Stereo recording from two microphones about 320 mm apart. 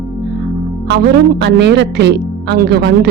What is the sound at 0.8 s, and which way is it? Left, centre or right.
Speech, right.